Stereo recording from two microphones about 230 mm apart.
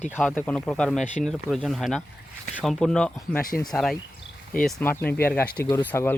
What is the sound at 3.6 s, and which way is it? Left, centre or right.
A man's voice, centre.